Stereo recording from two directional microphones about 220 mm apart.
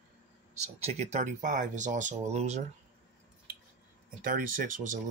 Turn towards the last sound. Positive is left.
turn(degrees=-35)  # may be behind; listen again after turning